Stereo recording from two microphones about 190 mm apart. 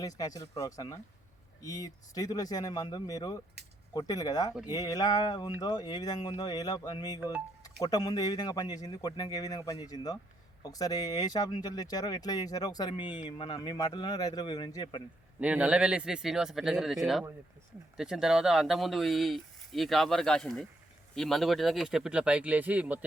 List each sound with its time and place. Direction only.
0.0 s speech: 20° left (ahead or behind)
15.4 s speech: 5° right (ahead or behind)